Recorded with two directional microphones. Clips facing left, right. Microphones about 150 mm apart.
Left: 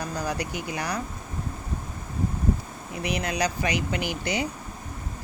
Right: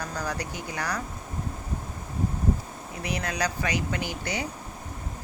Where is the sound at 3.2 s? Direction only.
15° left (ahead or behind).